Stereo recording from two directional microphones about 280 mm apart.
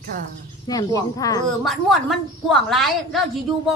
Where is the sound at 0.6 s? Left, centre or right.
Centre.